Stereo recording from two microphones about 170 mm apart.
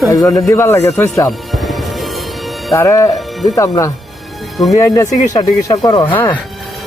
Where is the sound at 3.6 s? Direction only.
20° left (ahead or behind).